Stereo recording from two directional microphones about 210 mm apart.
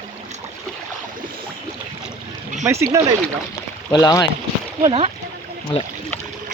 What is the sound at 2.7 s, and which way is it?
Speech, 15° right (ahead or behind).